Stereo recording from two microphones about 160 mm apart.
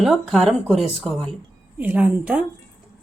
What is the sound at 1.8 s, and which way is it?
Speech, 10° right (ahead or behind).